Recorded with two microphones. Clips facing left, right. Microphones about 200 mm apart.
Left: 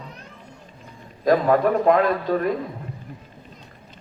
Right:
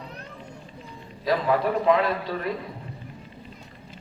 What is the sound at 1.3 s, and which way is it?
A man's voice, 45° left (ahead or behind).